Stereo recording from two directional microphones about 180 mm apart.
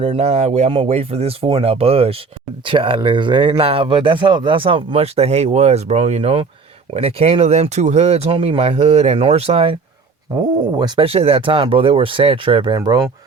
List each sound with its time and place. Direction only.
0.0 s speech: 35° right (ahead or behind)
10.8 s speech: 25° right (ahead or behind)